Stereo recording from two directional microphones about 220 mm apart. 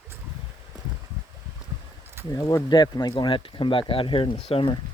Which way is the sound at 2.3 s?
15° left (ahead or behind).